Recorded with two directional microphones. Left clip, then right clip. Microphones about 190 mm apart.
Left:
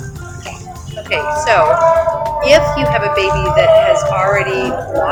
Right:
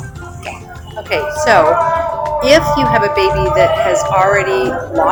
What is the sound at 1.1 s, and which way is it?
Speech, 45° right (ahead or behind).